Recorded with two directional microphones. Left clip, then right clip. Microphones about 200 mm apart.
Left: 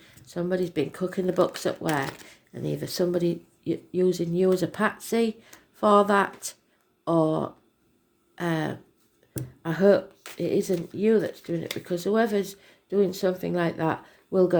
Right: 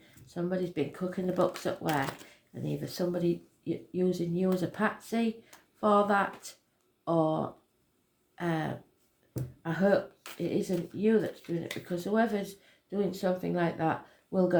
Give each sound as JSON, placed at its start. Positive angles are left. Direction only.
{"t": 0.0, "sound": "speech", "side_deg": 50}
{"t": 2.8, "sound": "speech", "side_deg": 50}